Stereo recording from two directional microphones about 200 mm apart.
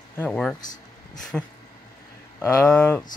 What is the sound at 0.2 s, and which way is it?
Speech, 5° left (ahead or behind).